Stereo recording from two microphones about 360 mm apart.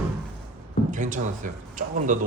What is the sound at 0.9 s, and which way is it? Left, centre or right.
Speech, right.